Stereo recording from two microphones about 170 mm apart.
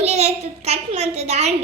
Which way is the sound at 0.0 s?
40° right (ahead or behind).